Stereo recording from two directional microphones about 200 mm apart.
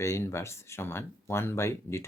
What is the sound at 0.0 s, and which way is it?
Speech, 15° left (ahead or behind).